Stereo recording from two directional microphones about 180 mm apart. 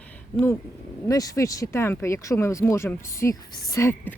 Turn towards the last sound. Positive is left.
turn(degrees=15)  # may be behind; listen again after turning